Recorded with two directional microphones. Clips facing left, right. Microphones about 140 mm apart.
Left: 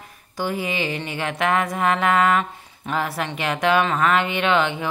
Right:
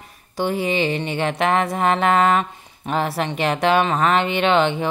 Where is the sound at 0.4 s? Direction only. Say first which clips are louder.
Right 4 dB; 30° right (ahead or behind).